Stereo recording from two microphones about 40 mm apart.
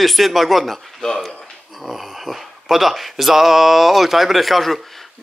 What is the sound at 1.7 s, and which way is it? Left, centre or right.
A man's voice, centre.